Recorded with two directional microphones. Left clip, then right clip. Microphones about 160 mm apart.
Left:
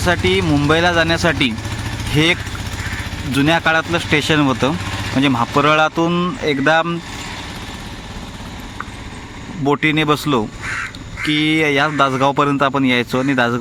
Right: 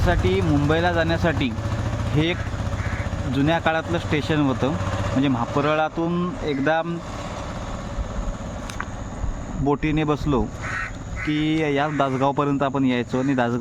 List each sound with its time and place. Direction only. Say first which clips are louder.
0.0 s speech: left 6 dB; 15° left (ahead or behind)
9.6 s speech: left 7 dB; 10° left (ahead or behind)